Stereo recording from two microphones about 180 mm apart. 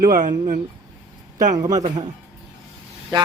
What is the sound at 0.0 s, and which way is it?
Speech, 50° right (ahead or behind).